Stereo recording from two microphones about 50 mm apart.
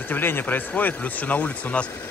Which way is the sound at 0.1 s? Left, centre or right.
Left.